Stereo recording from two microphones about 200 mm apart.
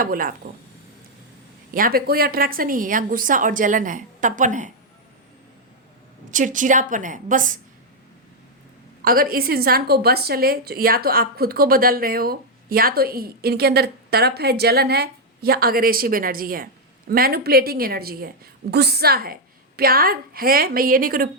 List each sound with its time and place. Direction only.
0.0 s a woman's voice: 45° right (ahead or behind)
1.7 s a woman's voice: 45° right (ahead or behind)
6.3 s a woman's voice: 40° right (ahead or behind)
9.0 s a woman's voice: 45° right (ahead or behind)